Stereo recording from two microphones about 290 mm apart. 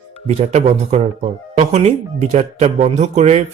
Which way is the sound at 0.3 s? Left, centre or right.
Right.